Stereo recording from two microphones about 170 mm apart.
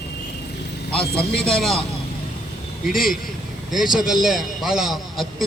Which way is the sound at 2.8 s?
Centre (ahead or behind).